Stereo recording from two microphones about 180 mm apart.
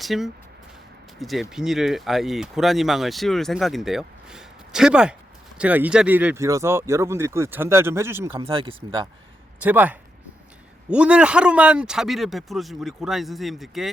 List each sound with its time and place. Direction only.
0.0 s speech: centre (ahead or behind)
8.4 s speech: 30° right (ahead or behind)
9.6 s speech: 10° right (ahead or behind)